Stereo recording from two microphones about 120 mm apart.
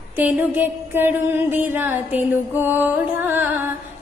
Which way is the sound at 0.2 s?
15° right (ahead or behind).